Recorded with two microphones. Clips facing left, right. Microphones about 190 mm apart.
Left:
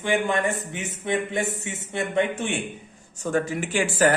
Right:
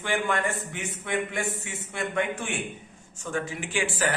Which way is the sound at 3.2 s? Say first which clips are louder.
Left 7 dB; 40° left (ahead or behind).